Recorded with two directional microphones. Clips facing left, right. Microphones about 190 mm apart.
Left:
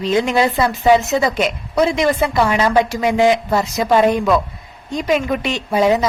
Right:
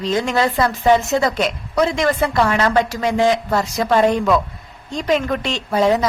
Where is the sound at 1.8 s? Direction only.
15° left (ahead or behind).